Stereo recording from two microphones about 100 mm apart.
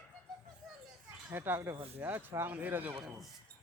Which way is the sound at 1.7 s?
75° right (ahead or behind).